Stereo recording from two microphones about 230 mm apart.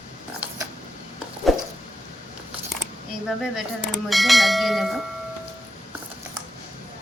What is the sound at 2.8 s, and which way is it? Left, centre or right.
Speech, centre.